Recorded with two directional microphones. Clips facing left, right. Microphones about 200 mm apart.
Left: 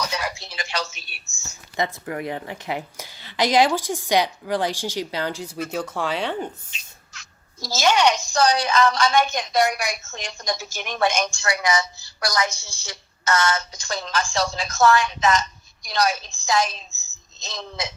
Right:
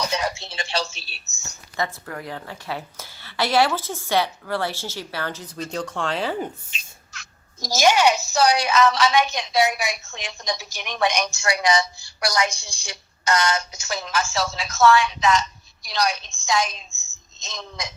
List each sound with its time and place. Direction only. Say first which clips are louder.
0.1 s speech: right 3 dB; 25° right (ahead or behind)
1.7 s a woman's voice: left 3 dB; 20° left (ahead or behind); by 6.3 s centre (ahead or behind)
7.6 s a woman's voice: right 1 dB; 15° right (ahead or behind); by 11.3 s centre (ahead or behind)
11.6 s a woman's voice: right 2 dB; 30° right (ahead or behind)
12.2 s a woman's voice: right 1 dB; 10° right (ahead or behind)
16.7 s a sound: left 1 dB; 35° left (ahead or behind)
17.6 s a woman's voice: left 3 dB; 5° left (ahead or behind)